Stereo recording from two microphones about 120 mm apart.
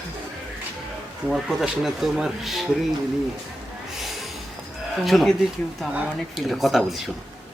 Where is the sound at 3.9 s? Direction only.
Centre (ahead or behind).